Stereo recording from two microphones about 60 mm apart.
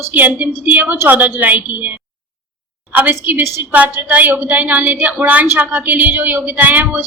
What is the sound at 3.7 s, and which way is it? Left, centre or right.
A woman's voice, right.